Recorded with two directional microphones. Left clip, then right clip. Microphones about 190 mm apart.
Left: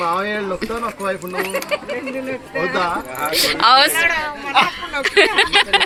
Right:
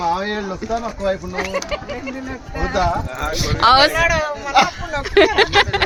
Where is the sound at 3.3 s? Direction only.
Centre (ahead or behind).